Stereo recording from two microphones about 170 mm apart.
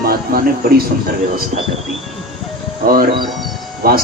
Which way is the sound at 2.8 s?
60° right (ahead or behind).